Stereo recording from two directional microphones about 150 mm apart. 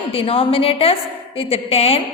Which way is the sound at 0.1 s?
40° left (ahead or behind).